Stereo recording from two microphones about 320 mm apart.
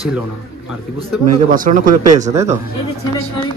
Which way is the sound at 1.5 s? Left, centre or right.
Right.